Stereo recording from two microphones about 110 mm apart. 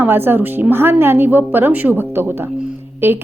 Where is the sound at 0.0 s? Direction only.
20° right (ahead or behind).